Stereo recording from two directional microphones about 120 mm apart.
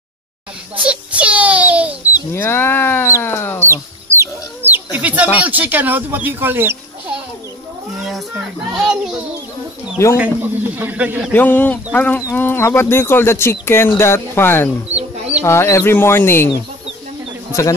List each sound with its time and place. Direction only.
0.8 s a sound: 10° right (ahead or behind)
2.3 s speech: 20° left (ahead or behind)
4.2 s speech: 15° right (ahead or behind)
8.0 s a child's voice: centre (ahead or behind)
11.3 s speech: 15° left (ahead or behind)
17.5 s speech: 25° left (ahead or behind)